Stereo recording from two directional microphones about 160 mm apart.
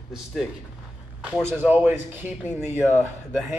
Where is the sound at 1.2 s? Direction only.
10° right (ahead or behind).